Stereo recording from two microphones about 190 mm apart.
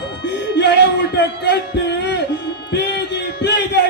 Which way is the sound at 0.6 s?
65° left (ahead or behind).